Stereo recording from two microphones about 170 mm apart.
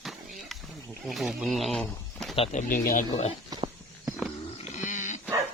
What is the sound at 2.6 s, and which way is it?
Speech, 55° left (ahead or behind).